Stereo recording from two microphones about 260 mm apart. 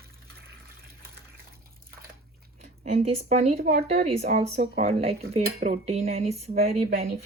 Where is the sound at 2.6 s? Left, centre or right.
Right.